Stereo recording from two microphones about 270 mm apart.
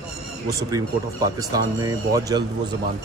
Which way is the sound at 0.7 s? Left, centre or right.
Centre.